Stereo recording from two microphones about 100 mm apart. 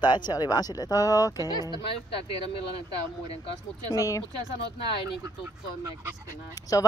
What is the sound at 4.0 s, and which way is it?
Speech, 35° left (ahead or behind).